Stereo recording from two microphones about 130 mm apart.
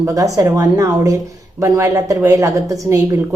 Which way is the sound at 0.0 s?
25° right (ahead or behind).